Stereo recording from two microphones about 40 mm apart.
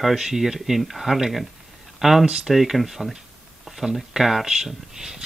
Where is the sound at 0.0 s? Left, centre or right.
Centre.